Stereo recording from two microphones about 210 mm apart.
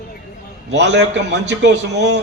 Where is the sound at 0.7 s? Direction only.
55° right (ahead or behind).